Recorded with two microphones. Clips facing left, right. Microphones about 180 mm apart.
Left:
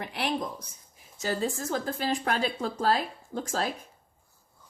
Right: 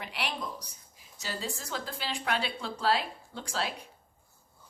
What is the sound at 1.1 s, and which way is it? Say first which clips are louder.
A woman's voice: left 8 dB; 50° left (ahead or behind).